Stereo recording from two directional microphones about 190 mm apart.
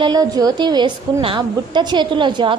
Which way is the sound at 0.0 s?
20° right (ahead or behind).